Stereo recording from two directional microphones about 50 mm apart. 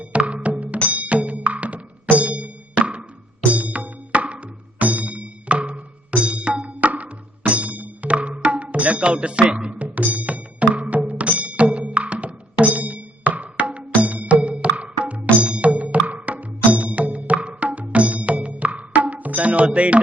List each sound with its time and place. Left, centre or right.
0.0 s music: right